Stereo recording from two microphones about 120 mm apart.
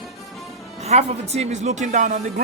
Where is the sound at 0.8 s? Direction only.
60° right (ahead or behind); by 2.1 s 85° right.